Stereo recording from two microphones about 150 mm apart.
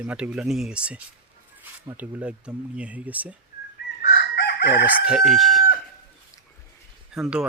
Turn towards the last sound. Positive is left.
turn(degrees=-5)  # may be behind; listen again after turning